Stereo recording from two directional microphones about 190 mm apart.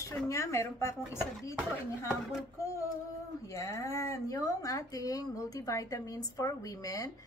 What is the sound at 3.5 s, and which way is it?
Speech, 15° left (ahead or behind).